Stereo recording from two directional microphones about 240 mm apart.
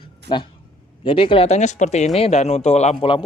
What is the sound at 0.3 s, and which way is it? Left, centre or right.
Speech, centre.